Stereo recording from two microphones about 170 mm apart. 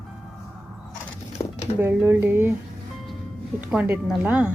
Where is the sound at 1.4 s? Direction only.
20° left (ahead or behind).